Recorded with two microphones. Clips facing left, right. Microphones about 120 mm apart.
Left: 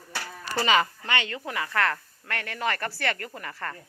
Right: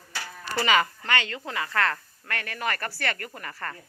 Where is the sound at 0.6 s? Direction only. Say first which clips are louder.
Even; 20° left (ahead or behind).